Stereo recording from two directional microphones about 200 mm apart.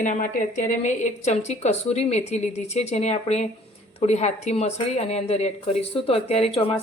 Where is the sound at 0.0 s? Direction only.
40° left (ahead or behind).